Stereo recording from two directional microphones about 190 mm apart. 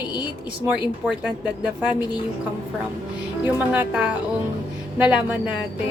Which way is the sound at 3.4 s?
10° right (ahead or behind).